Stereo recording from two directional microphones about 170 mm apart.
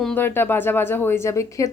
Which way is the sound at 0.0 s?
10° left (ahead or behind).